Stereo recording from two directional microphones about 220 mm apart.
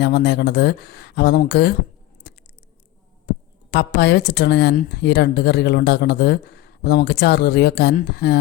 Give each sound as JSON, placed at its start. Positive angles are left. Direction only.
{"t": 0.0, "sound": "speech", "side_deg": 45}
{"t": 3.7, "sound": "speech", "side_deg": 45}